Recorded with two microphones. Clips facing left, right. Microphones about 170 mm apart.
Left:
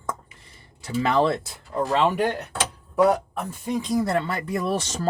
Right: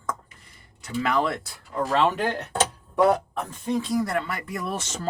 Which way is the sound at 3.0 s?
5° left (ahead or behind).